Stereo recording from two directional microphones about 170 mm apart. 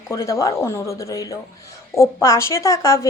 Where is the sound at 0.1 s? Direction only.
20° left (ahead or behind).